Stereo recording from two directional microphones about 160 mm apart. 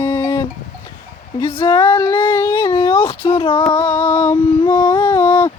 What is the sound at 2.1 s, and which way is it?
Child singing, 15° left (ahead or behind).